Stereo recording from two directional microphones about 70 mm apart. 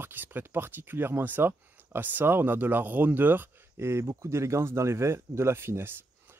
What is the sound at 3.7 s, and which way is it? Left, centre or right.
Speech, right.